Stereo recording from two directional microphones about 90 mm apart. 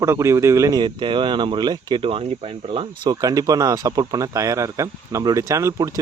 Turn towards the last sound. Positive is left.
turn(degrees=-35)  # may be behind; listen again after turning